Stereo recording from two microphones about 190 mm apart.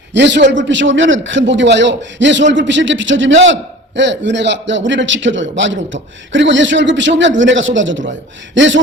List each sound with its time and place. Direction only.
0.1 s a man's voice: 70° right (ahead or behind)